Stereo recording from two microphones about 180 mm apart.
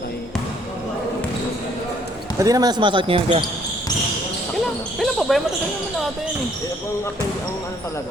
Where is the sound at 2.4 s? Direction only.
20° right (ahead or behind).